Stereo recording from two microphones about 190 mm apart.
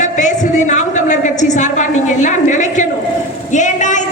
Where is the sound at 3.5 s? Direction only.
40° left (ahead or behind).